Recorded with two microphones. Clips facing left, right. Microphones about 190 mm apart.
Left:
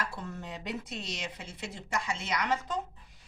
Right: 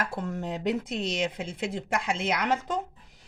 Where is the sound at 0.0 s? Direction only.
50° right (ahead or behind).